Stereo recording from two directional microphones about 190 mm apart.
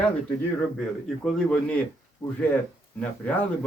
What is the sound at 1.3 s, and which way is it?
Speech, centre (ahead or behind).